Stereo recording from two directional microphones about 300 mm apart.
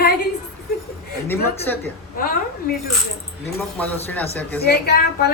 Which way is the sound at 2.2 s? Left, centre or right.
Left.